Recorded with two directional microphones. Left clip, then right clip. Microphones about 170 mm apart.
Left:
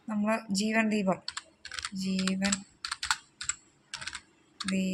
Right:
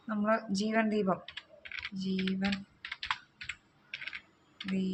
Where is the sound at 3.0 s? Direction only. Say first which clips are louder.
Left 4 dB; 90° left.